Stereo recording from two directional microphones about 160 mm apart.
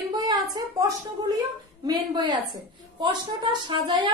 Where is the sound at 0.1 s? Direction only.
25° right (ahead or behind).